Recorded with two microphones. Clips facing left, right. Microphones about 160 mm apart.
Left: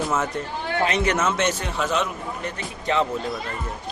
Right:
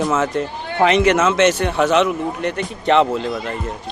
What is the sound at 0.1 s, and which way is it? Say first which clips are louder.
A man's voice: right 6 dB; 90° right.